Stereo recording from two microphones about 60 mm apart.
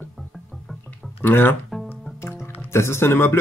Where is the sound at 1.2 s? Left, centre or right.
Left.